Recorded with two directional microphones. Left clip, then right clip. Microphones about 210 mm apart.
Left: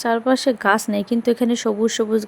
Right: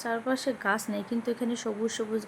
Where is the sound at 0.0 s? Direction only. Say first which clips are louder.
Left 11 dB; 40° left (ahead or behind).